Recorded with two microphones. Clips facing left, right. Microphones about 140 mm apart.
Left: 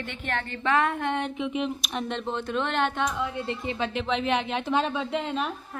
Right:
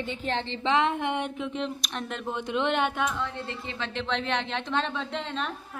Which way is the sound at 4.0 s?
5° left (ahead or behind).